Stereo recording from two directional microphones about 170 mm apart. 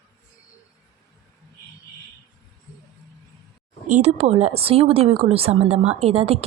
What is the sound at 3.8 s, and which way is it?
Speech, 45° right (ahead or behind).